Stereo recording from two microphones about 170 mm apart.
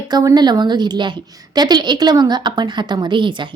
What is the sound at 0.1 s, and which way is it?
A woman's voice, 25° right (ahead or behind).